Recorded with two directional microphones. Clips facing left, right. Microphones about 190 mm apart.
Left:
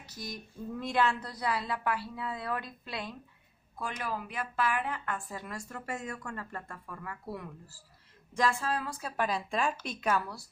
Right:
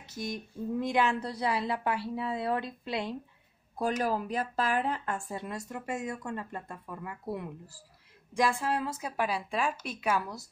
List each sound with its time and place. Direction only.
0.1 s speech: 25° right (ahead or behind)
3.7 s speech: 40° right (ahead or behind); by 9.1 s 25° right (ahead or behind)
9.1 s a woman's voice: 10° right (ahead or behind)